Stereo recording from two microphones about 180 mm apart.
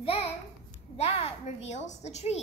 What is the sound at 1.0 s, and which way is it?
A woman's voice, 35° left (ahead or behind).